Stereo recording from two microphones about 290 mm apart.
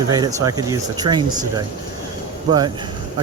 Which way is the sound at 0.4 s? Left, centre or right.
Centre.